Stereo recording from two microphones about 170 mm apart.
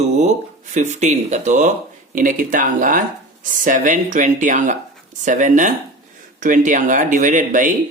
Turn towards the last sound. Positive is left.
turn(degrees=-50)  # may be behind; listen again after turning